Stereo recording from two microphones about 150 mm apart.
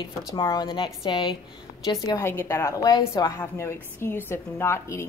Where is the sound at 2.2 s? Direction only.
15° left (ahead or behind).